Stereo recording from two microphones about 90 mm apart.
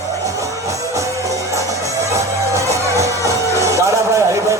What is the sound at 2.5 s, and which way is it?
Music, 35° right (ahead or behind).